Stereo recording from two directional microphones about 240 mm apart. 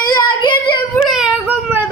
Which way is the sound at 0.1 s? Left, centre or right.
Centre.